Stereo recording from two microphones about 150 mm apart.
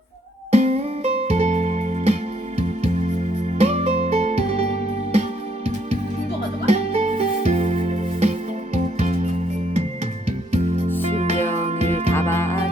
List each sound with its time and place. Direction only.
0.5 s music: 45° right (ahead or behind)
3.3 s music: 45° right (ahead or behind)
6.7 s music: 45° right (ahead or behind)
12.1 s music: 15° left (ahead or behind)